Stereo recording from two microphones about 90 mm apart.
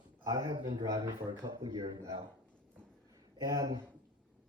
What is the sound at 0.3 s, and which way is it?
Speech, 50° right (ahead or behind).